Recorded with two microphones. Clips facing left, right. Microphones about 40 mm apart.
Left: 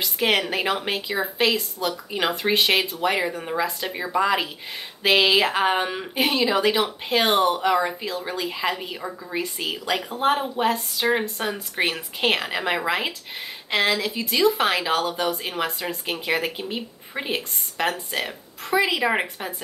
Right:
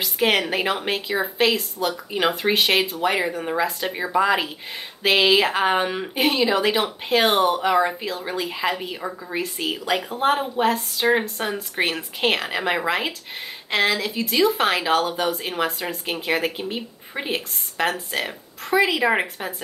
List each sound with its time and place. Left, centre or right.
0.0 s speech: centre